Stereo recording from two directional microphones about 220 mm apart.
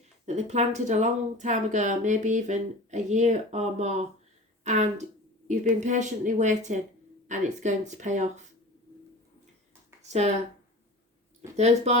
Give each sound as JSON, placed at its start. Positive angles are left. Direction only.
{"t": 0.3, "sound": "speech", "side_deg": -30}
{"t": 10.1, "sound": "speech", "side_deg": -30}
{"t": 11.5, "sound": "speech", "side_deg": -30}